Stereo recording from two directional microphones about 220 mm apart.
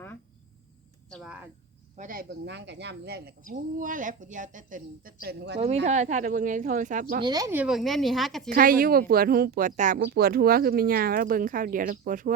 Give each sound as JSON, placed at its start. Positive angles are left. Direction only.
{"t": 1.1, "sound": "speech", "side_deg": -5}
{"t": 2.0, "sound": "speech", "side_deg": -40}
{"t": 3.5, "sound": "speech", "side_deg": -35}
{"t": 5.2, "sound": "speech", "side_deg": -45}
{"t": 5.5, "sound": "speech", "side_deg": -30}
{"t": 7.2, "sound": "speech", "side_deg": -20}
{"t": 8.4, "sound": "speech", "side_deg": -40}